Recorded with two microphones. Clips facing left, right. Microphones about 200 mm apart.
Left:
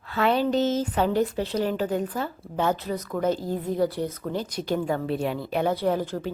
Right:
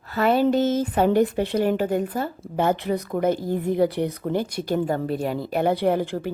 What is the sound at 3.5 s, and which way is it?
Speech, 60° right (ahead or behind).